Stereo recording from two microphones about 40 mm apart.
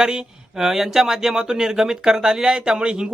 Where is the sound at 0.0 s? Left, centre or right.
Centre.